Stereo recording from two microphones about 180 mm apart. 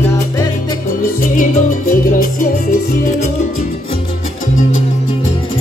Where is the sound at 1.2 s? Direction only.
45° left (ahead or behind).